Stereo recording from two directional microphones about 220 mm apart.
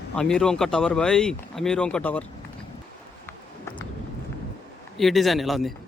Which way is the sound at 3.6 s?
20° left (ahead or behind).